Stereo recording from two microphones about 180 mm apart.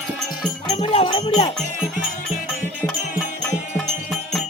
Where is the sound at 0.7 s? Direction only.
30° left (ahead or behind).